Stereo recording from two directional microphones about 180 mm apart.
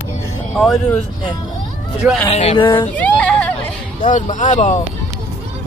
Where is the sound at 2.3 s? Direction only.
30° left (ahead or behind).